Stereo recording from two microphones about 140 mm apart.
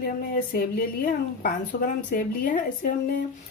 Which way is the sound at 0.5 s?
90° left.